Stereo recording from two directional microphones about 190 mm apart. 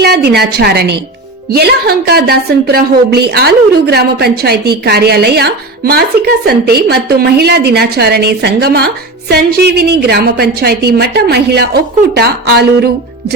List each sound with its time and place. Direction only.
0.0 s a woman's voice: 60° right (ahead or behind)